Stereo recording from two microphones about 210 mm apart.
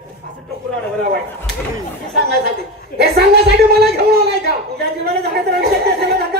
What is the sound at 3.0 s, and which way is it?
Speech, 50° right (ahead or behind).